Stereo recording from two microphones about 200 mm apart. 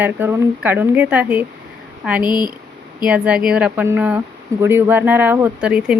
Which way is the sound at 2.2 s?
20° left (ahead or behind).